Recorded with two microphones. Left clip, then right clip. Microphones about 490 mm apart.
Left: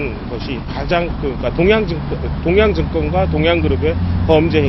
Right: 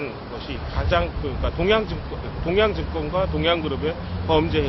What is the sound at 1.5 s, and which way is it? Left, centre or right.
Speech, left.